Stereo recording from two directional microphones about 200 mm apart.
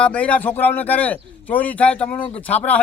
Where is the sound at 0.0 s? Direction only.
5° left (ahead or behind).